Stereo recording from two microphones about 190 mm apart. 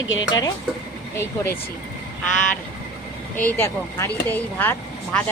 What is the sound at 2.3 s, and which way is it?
Frog, 40° left (ahead or behind).